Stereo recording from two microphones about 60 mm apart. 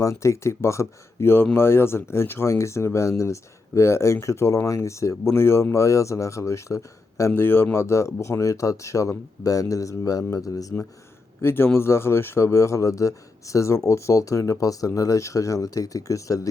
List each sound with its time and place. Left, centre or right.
0.0 s speech: left
7.3 s speech: left
11.4 s speech: left